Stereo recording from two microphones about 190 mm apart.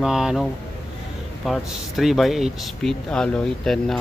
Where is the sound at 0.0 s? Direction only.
5° right (ahead or behind).